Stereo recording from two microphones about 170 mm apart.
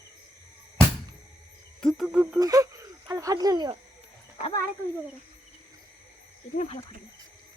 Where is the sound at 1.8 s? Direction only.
Centre (ahead or behind).